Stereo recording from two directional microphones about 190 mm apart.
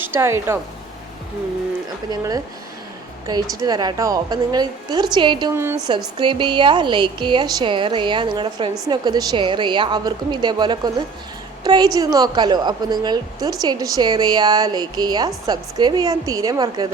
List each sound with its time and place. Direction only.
0.0 s speech: 15° right (ahead or behind)
2.0 s a woman's voice: 20° right (ahead or behind)
5.5 s a woman's voice: 10° right (ahead or behind)
6.1 s a woman's voice: 25° right (ahead or behind)